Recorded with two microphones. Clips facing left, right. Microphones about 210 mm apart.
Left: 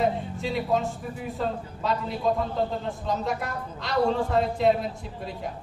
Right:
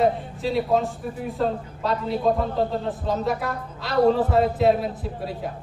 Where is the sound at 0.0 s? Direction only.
Centre (ahead or behind).